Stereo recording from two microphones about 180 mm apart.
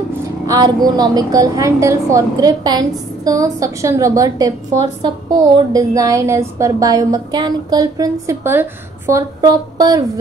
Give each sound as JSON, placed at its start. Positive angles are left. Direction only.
{"t": 0.5, "sound": "a woman's voice", "side_deg": -20}